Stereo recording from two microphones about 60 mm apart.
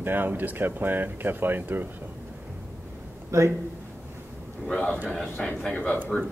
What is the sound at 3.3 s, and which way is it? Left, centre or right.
Speech, right.